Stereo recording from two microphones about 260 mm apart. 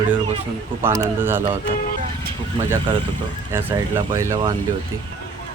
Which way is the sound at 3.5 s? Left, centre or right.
Centre.